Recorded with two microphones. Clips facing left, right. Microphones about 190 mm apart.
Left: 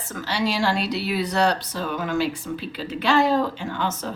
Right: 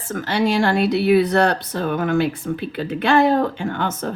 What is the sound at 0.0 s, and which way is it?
Speech, 50° right (ahead or behind).